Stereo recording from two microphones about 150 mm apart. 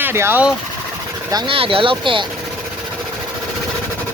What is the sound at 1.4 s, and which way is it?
Speech, 35° right (ahead or behind).